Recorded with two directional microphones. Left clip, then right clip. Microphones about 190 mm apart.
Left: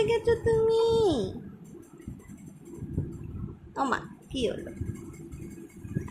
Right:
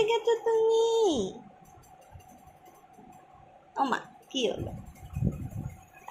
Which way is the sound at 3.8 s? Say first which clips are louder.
Even; 5° left (ahead or behind).